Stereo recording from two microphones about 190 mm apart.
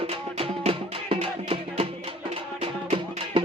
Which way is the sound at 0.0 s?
30° right (ahead or behind).